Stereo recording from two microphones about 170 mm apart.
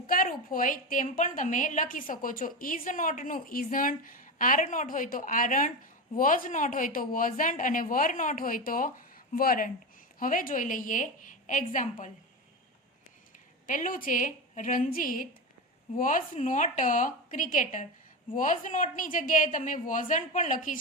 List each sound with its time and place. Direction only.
0.1 s a woman's voice: 55° left (ahead or behind)
13.7 s a woman's voice: 50° left (ahead or behind)